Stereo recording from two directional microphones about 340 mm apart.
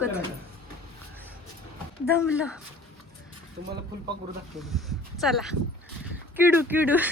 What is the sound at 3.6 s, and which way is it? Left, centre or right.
Speech, right.